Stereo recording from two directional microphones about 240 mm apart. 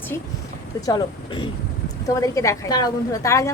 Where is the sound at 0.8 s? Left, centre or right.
Centre.